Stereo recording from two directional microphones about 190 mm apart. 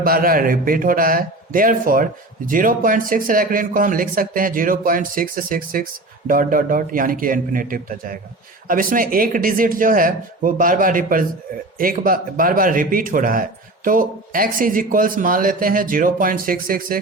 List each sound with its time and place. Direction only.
0.0 s speech: 50° right (ahead or behind)